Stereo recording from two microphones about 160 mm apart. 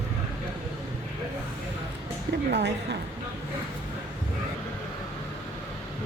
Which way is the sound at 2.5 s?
90° right.